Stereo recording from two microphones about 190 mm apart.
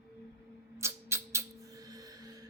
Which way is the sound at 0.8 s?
15° right (ahead or behind).